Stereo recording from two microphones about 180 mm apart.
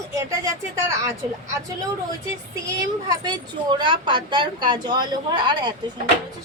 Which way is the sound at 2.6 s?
20° right (ahead or behind).